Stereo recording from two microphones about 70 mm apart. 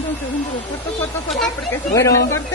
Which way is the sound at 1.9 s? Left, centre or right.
Left.